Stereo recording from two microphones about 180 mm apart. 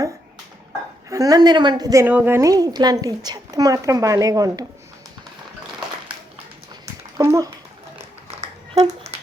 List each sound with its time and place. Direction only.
1.1 s a woman's voice: 20° right (ahead or behind)
7.2 s speech: 15° right (ahead or behind)
8.4 s a sound: 35° right (ahead or behind)